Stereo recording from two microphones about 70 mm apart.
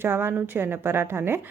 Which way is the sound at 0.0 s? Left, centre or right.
Right.